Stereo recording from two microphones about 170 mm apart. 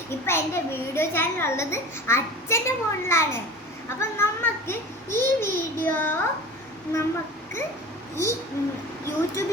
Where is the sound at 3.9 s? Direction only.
15° left (ahead or behind).